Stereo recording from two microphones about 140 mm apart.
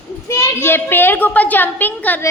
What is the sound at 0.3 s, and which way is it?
A woman's voice, 15° left (ahead or behind).